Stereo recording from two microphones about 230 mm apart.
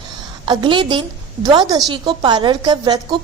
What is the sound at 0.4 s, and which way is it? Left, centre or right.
A woman's voice, centre.